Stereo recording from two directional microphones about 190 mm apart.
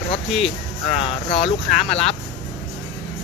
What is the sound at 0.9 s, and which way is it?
Speech, 35° left (ahead or behind).